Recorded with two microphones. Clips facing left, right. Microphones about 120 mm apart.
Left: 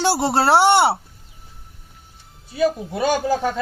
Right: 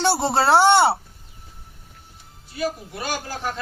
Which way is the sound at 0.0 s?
10° left (ahead or behind).